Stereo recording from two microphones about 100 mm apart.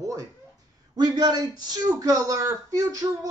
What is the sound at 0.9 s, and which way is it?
Speech, 45° right (ahead or behind).